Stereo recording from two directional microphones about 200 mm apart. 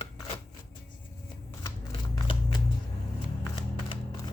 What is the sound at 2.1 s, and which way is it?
Shuffling cards, 20° left (ahead or behind).